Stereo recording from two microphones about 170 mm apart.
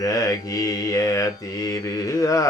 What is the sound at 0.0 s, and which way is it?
Mantra, 20° left (ahead or behind).